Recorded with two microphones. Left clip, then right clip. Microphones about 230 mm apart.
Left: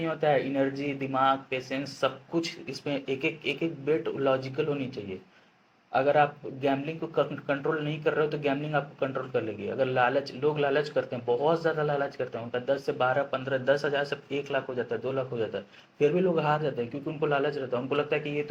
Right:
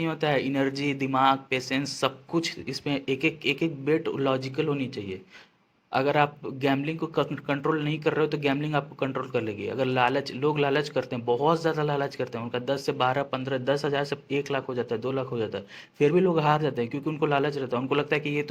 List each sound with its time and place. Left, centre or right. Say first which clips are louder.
0.0 s speech: even; right